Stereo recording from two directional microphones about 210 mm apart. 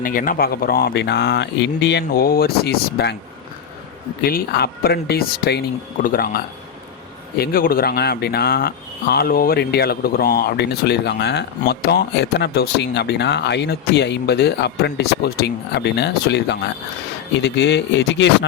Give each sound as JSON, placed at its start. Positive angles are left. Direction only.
{"t": 0.0, "sound": "speech", "side_deg": 40}
{"t": 4.2, "sound": "speech", "side_deg": 45}